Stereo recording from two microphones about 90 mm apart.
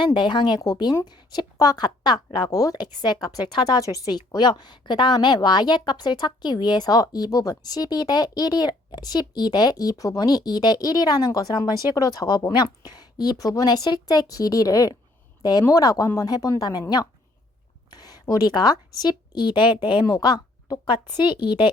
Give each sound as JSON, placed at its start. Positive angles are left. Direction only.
{"t": 0.0, "sound": "a woman's voice", "side_deg": 60}
{"t": 17.9, "sound": "a woman's voice", "side_deg": 45}
{"t": 20.1, "sound": "a woman's voice", "side_deg": 45}